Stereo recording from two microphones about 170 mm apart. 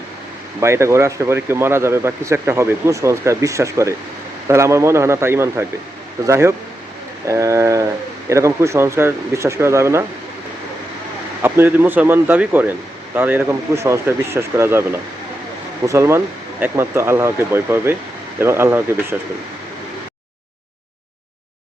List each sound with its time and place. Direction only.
0.6 s speech: 15° right (ahead or behind)
11.4 s speech: 15° right (ahead or behind)